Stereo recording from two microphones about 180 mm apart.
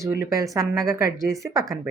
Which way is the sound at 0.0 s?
15° right (ahead or behind).